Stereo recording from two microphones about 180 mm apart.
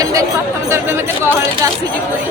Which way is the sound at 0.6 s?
15° right (ahead or behind).